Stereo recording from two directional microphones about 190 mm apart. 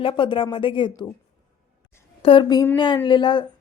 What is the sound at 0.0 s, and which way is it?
A woman's voice, 25° left (ahead or behind).